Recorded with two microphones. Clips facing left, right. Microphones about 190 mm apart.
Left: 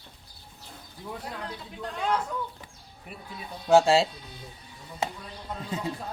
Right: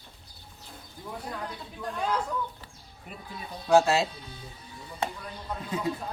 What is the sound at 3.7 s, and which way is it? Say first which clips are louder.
Speech: left 2 dB; 30° left (ahead or behind).